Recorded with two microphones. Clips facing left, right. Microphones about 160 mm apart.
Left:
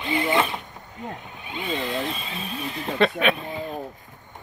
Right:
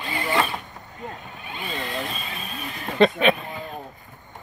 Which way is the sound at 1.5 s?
20° left (ahead or behind).